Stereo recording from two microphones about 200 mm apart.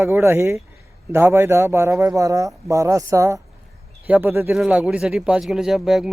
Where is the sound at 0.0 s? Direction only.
10° right (ahead or behind).